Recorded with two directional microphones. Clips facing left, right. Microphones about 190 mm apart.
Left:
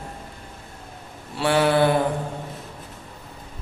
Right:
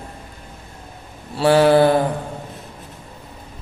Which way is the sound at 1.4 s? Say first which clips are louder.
Right 6 dB; 35° right (ahead or behind).